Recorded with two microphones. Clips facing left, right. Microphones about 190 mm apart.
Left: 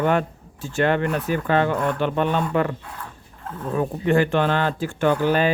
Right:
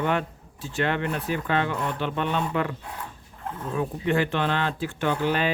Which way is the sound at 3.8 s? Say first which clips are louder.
Left 5 dB; 45° left (ahead or behind).